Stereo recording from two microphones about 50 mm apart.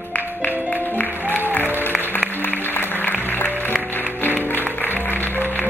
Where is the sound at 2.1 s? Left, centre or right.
Left.